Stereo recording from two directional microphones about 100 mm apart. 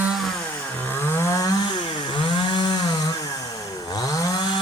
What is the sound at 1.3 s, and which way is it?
Chainsaw, 40° left (ahead or behind).